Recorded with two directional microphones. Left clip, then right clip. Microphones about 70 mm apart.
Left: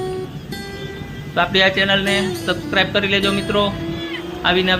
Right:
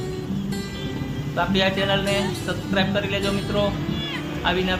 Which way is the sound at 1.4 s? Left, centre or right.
Left.